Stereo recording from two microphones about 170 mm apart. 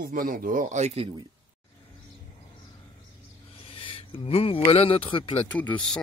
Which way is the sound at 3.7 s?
30° left (ahead or behind).